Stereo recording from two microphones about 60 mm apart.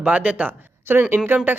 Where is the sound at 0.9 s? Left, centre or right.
Right.